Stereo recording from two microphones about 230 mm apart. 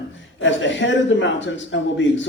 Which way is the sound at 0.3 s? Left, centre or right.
Left.